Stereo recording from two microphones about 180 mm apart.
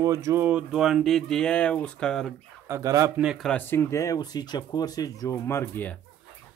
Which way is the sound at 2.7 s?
20° right (ahead or behind).